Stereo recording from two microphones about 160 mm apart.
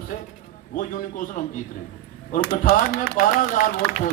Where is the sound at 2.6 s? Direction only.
75° left (ahead or behind); by 4.0 s 55° left (ahead or behind).